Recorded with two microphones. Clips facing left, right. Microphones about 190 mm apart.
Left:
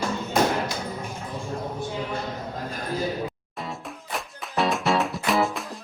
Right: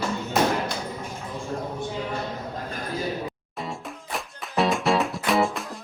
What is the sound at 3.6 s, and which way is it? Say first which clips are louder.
Music: right 1 dB; centre (ahead or behind).